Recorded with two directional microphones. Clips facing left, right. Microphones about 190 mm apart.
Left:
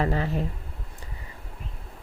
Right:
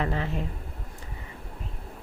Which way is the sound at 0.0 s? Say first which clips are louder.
Left 3 dB; 40° left (ahead or behind).